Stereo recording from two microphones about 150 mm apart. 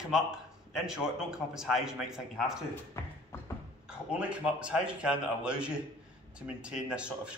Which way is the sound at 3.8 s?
5° right (ahead or behind).